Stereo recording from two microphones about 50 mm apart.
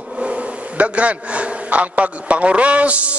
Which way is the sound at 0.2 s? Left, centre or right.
Right.